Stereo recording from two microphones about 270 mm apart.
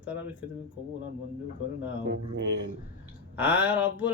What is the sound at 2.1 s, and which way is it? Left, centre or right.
Speech, right.